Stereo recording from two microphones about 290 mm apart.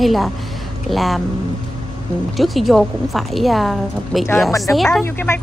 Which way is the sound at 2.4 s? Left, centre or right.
Centre.